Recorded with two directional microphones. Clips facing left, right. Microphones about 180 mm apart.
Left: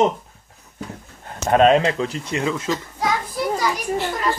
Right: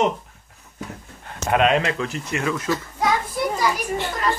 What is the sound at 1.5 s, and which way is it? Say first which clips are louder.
A man's voice: left 4 dB; 35° left (ahead or behind).